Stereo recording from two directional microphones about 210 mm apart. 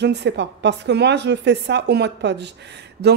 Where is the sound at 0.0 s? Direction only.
55° right (ahead or behind).